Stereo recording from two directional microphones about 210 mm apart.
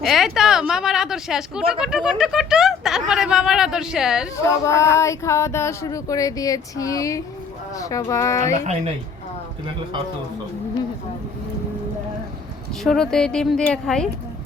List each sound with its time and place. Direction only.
0.0 s a sound: centre (ahead or behind)
0.3 s speech: centre (ahead or behind)
4.4 s speech: 15° left (ahead or behind)
8.5 s speech: 35° right (ahead or behind)
12.8 s speech: 5° left (ahead or behind)